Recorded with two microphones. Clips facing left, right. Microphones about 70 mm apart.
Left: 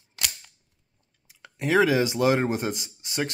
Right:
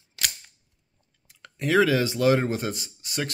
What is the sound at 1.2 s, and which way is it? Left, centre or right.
Speech, centre.